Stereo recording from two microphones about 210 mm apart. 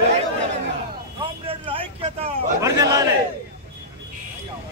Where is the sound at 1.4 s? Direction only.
25° right (ahead or behind).